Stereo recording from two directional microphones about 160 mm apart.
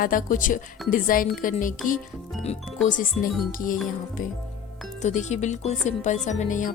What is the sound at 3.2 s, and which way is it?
Speech, 60° left (ahead or behind).